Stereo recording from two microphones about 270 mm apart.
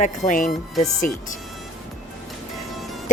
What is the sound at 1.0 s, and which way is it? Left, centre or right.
Speech, centre.